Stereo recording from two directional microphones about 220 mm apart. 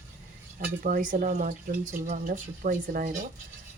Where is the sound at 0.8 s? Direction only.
40° right (ahead or behind).